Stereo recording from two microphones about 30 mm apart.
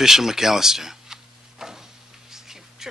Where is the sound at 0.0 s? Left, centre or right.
Centre.